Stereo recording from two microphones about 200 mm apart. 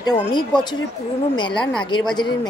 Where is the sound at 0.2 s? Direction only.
25° left (ahead or behind).